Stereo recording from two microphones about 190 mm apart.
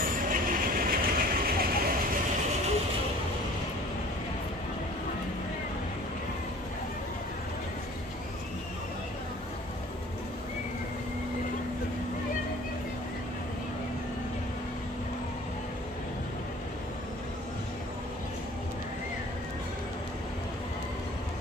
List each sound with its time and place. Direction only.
0.0 s train: 45° right (ahead or behind)